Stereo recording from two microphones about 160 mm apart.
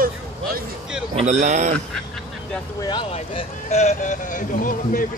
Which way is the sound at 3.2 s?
45° left (ahead or behind).